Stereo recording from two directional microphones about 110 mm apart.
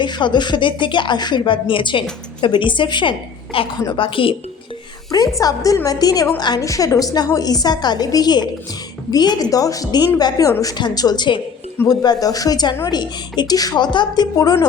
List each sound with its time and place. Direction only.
0.0 s a woman's voice: 45° left (ahead or behind)
5.4 s a woman's voice: 35° left (ahead or behind)